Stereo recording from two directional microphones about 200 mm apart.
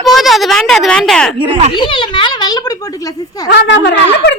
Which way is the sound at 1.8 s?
25° left (ahead or behind).